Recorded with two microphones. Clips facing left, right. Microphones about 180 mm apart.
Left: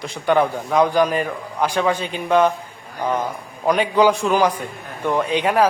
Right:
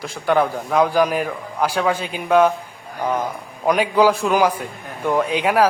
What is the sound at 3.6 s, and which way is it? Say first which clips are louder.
A man's voice: even; 10° right (ahead or behind).